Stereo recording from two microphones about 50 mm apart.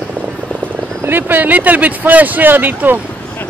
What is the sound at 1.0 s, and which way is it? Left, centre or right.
Speech, right.